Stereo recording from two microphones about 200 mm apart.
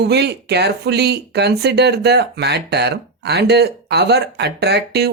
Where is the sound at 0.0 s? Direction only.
55° right (ahead or behind).